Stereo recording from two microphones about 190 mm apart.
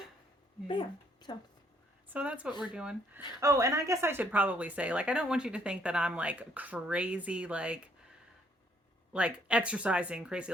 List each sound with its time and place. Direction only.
0.7 s a woman's voice: 25° left (ahead or behind)
2.1 s speech: 5° right (ahead or behind)
3.2 s speech: 25° left (ahead or behind)
3.4 s speech: 15° right (ahead or behind)
9.1 s speech: 5° right (ahead or behind)